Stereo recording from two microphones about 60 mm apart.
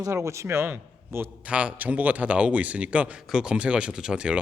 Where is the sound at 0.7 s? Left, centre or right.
Right.